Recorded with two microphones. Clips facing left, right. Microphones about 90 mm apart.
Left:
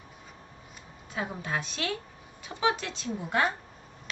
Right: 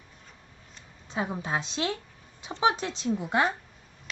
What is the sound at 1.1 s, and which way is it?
Speech, 25° right (ahead or behind).